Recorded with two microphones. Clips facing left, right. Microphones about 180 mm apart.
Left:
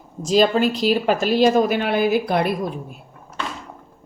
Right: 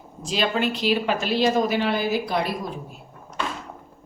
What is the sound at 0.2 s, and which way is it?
Speech, 40° left (ahead or behind).